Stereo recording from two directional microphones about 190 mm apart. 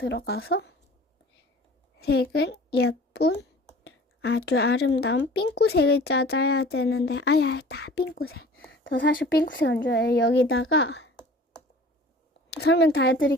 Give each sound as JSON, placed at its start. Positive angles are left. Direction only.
{"t": 0.0, "sound": "speech", "side_deg": 65}
{"t": 2.0, "sound": "a child's voice", "side_deg": 55}
{"t": 8.5, "sound": "a sound", "side_deg": 75}
{"t": 9.3, "sound": "speech", "side_deg": 60}
{"t": 12.6, "sound": "speech", "side_deg": 60}